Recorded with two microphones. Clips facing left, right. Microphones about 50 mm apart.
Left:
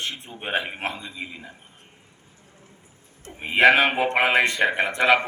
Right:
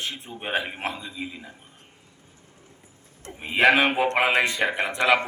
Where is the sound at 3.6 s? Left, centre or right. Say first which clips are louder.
Left 2 dB; centre.